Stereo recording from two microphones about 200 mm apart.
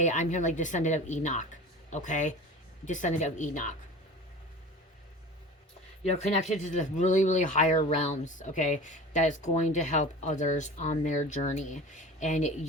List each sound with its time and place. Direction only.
0.0 s speech: 35° left (ahead or behind)
6.1 s speech: 35° left (ahead or behind)